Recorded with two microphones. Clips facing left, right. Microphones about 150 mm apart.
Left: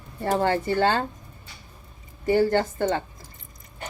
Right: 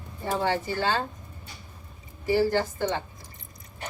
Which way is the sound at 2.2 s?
55° left (ahead or behind).